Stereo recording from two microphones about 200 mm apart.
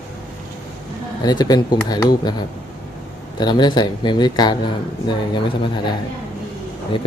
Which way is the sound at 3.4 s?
20° left (ahead or behind).